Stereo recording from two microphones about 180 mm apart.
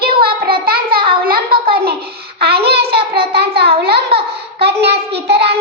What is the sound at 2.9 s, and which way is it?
Child singing, 60° right (ahead or behind).